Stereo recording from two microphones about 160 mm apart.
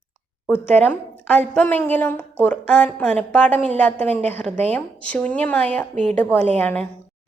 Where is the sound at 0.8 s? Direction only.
5° left (ahead or behind).